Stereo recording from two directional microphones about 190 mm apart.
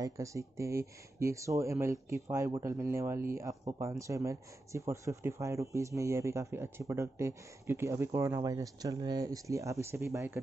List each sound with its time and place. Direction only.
0.0 s speech: 15° right (ahead or behind)